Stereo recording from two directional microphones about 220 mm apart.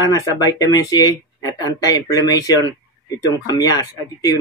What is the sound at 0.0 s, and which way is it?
Speech, 15° left (ahead or behind).